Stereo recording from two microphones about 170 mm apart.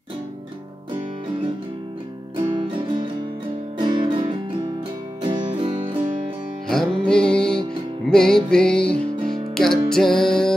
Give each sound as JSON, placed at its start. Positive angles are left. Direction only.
{"t": 2.3, "sound": "music", "side_deg": -30}
{"t": 6.7, "sound": "music", "side_deg": 5}